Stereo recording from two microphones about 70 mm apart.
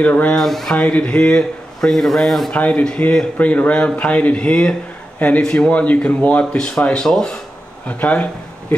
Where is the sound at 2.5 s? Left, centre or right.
Centre.